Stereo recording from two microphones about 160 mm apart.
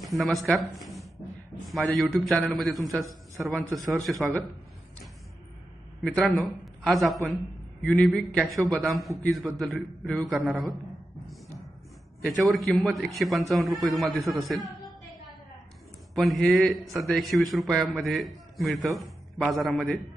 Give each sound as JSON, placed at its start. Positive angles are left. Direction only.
{"t": 0.1, "sound": "a man's voice", "side_deg": 0}
{"t": 6.0, "sound": "a man's voice", "side_deg": 0}
{"t": 12.2, "sound": "a man's voice", "side_deg": 0}
{"t": 16.2, "sound": "a man's voice", "side_deg": 0}